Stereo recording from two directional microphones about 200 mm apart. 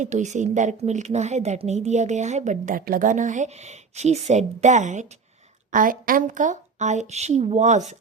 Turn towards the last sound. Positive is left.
turn(degrees=-35)  # may be behind; listen again after turning